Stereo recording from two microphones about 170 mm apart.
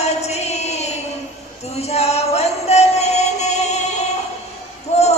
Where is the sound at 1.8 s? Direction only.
40° left (ahead or behind).